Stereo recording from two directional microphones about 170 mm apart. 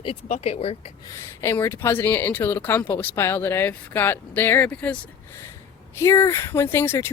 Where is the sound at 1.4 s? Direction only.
15° left (ahead or behind).